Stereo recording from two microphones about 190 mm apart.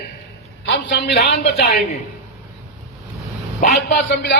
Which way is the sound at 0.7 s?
65° left (ahead or behind).